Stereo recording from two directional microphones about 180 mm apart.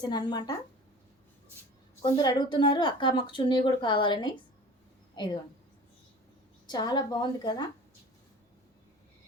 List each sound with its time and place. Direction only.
0.0 s speech: 25° left (ahead or behind)
2.0 s a woman's voice: 25° left (ahead or behind)
6.7 s speech: 25° left (ahead or behind)